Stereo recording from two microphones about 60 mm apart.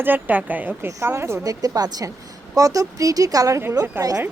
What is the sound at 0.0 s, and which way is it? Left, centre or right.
Speech, right.